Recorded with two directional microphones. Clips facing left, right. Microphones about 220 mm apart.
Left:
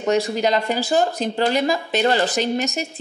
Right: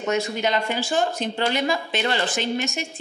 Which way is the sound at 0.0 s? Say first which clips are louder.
Left 4 dB; 35° left (ahead or behind).